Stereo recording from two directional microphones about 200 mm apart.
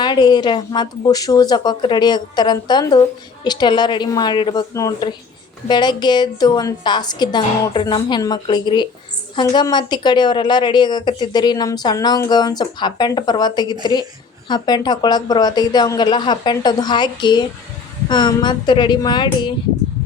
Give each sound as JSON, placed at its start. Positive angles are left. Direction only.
{"t": 0.0, "sound": "speech", "side_deg": 20}